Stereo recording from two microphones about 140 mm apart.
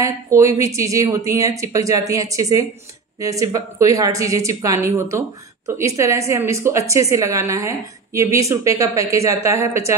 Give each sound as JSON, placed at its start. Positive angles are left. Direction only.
{"t": 0.0, "sound": "a woman's voice", "side_deg": -20}